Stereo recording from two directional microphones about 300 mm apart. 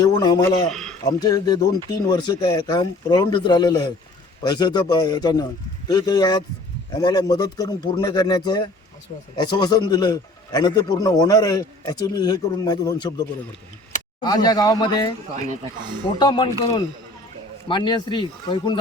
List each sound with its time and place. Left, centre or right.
0.0 s a man's voice: centre
0.7 s speech: centre
1.2 s a man's voice: centre
16.1 s a man's voice: centre